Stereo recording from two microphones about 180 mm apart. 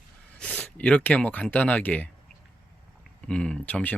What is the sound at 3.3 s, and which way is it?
Speech, 5° left (ahead or behind).